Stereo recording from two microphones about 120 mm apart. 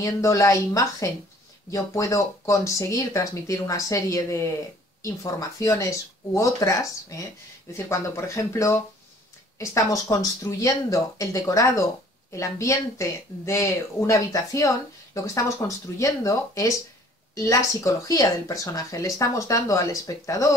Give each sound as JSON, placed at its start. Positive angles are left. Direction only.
{"t": 0.0, "sound": "speech", "side_deg": 25}